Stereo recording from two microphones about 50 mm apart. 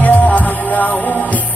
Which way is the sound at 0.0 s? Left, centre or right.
Left.